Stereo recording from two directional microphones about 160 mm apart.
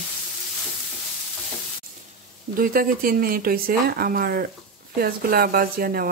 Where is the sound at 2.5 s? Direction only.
60° right (ahead or behind).